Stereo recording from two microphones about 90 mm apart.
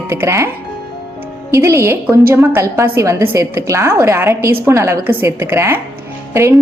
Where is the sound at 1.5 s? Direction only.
30° right (ahead or behind).